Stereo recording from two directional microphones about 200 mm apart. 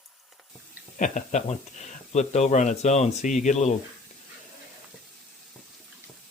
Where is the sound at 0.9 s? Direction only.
40° left (ahead or behind).